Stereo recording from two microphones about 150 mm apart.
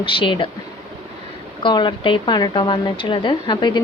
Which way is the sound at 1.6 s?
30° left (ahead or behind).